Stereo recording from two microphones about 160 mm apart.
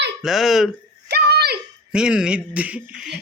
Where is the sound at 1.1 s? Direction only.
90° right.